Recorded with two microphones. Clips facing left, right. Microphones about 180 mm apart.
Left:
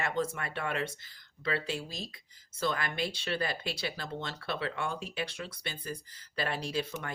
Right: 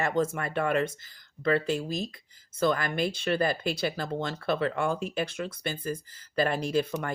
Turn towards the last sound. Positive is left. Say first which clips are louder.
# right 7 dB
turn(degrees=-50)  # may be behind; listen again after turning